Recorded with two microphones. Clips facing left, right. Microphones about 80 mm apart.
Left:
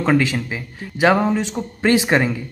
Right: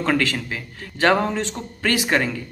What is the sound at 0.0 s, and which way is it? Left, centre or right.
A man's voice, centre.